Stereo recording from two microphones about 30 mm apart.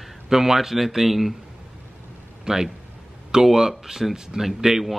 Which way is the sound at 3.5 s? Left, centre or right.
Centre.